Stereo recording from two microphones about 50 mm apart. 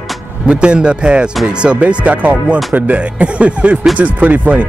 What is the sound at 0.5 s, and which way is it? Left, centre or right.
Speech, centre.